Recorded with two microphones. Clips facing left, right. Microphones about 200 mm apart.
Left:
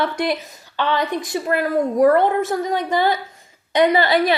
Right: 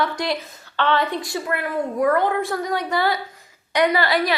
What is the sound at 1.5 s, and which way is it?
A woman's voice, 35° left (ahead or behind).